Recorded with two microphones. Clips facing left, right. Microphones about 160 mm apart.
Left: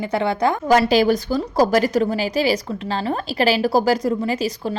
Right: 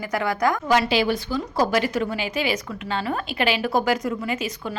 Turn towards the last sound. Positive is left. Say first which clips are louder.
# left 5 dB
turn(degrees=35)  # may be behind; listen again after turning